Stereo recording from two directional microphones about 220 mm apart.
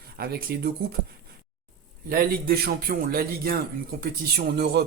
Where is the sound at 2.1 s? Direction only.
40° right (ahead or behind).